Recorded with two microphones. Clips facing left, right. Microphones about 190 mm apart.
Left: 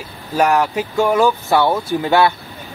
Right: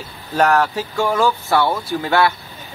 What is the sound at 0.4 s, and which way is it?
Speech, 15° left (ahead or behind).